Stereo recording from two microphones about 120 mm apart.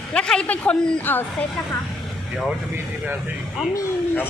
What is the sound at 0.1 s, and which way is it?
A woman's voice, 5° left (ahead or behind).